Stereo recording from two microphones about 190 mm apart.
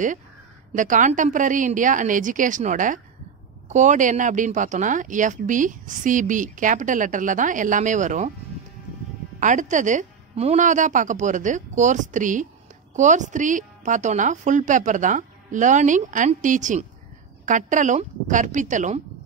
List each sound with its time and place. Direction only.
0.7 s a woman's voice: 40° right (ahead or behind)
9.4 s a woman's voice: 40° right (ahead or behind)